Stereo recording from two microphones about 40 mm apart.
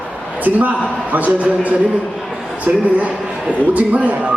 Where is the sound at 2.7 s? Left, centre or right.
Right.